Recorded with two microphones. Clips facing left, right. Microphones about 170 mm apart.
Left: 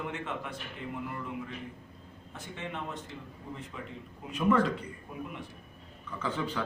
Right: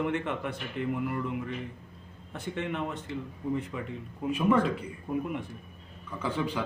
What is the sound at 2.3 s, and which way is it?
A man's voice, 60° right (ahead or behind).